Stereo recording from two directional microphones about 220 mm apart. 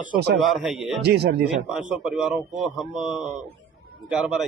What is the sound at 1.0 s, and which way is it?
Speech, 50° right (ahead or behind).